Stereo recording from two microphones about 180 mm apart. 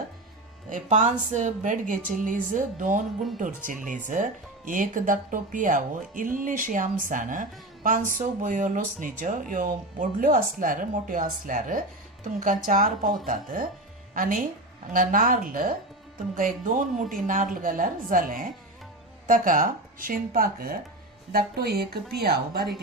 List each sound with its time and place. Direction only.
0.7 s a woman's voice: 40° right (ahead or behind); by 22.6 s 60° right (ahead or behind)